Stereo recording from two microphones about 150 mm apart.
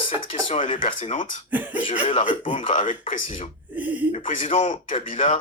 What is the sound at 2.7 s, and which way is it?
Speech, 55° left (ahead or behind).